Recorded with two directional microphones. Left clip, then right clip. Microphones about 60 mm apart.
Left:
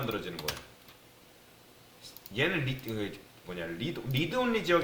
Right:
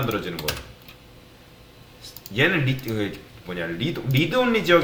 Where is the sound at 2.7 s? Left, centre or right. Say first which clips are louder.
Right 9 dB; right.